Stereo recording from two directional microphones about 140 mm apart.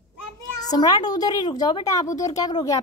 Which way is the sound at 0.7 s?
30° left (ahead or behind).